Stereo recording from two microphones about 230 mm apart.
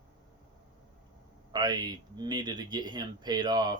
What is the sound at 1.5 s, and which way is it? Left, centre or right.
Speech, centre.